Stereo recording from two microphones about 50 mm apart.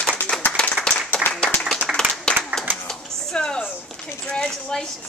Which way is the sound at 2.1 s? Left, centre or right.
Centre.